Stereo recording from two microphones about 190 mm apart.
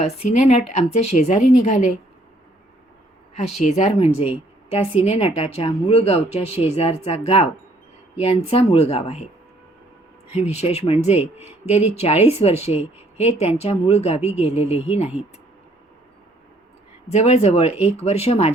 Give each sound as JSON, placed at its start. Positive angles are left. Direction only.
{"t": 0.0, "sound": "a woman's voice", "side_deg": 35}
{"t": 3.6, "sound": "a woman's voice", "side_deg": 35}
{"t": 10.5, "sound": "a woman's voice", "side_deg": 35}
{"t": 17.1, "sound": "a woman's voice", "side_deg": 35}